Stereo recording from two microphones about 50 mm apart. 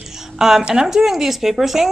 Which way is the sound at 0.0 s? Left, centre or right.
Centre.